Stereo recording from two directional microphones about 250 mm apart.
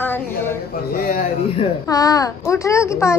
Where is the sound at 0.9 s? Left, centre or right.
Left.